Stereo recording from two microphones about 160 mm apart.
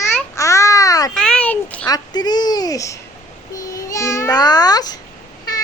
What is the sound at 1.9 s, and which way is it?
A woman's voice, 25° left (ahead or behind).